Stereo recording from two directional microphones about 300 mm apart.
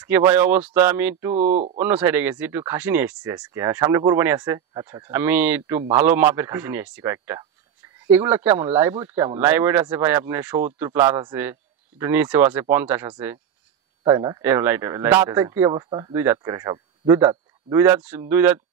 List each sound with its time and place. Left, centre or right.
0.0 s speech: centre
1.3 s speech: right
1.8 s speech: centre